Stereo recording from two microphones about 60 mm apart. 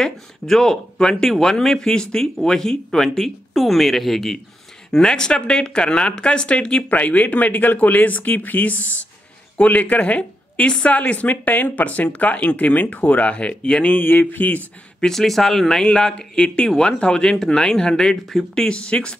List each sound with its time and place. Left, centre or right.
0.0 s speech: centre
13.9 s speech: left
15.0 s speech: centre